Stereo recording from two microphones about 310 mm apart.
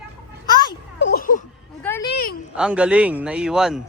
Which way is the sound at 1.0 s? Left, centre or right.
Left.